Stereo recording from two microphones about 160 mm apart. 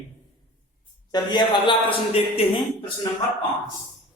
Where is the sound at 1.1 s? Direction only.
25° left (ahead or behind).